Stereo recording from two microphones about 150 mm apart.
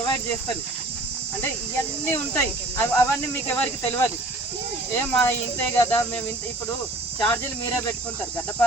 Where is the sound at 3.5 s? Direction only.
15° left (ahead or behind).